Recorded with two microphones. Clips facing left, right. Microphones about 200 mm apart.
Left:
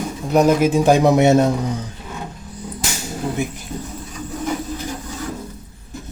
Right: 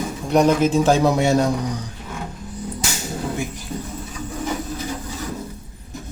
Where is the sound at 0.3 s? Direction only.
5° left (ahead or behind); by 1.5 s 20° left (ahead or behind).